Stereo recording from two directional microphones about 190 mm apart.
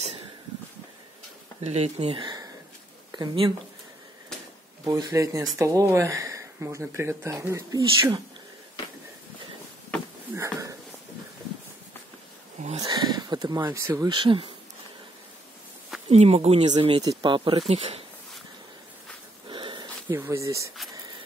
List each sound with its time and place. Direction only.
1.6 s speech: 35° right (ahead or behind)
4.8 s speech: 20° right (ahead or behind)
10.3 s a sound: 15° right (ahead or behind)
12.7 s speech: 20° right (ahead or behind)
16.1 s speech: 35° right (ahead or behind)
19.5 s a sound: 25° right (ahead or behind)
20.1 s speech: 15° right (ahead or behind)